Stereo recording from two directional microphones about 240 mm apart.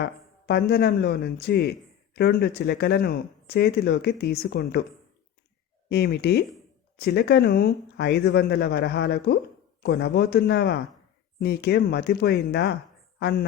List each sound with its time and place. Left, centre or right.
0.0 s speech: left
5.9 s speech: left